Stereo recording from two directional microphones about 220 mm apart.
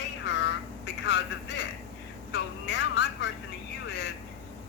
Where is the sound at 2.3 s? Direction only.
50° left (ahead or behind).